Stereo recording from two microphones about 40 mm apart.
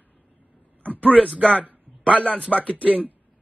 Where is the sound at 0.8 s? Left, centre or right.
Left.